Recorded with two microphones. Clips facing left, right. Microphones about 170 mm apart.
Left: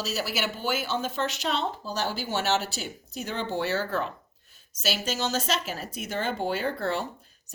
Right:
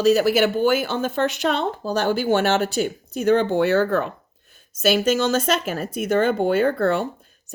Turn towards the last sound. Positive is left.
turn(degrees=-55)  # may be behind; listen again after turning